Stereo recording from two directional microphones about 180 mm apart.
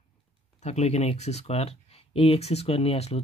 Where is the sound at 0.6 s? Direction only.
40° left (ahead or behind).